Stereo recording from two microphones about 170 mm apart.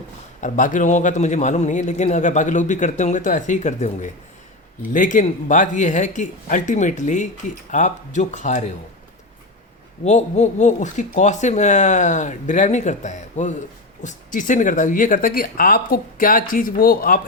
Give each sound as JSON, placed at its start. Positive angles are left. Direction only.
{"t": 0.4, "sound": "a man's voice", "side_deg": 50}
{"t": 10.0, "sound": "a man's voice", "side_deg": 40}